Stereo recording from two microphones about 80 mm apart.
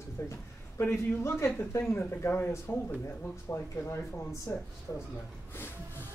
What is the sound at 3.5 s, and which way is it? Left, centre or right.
Speech, left.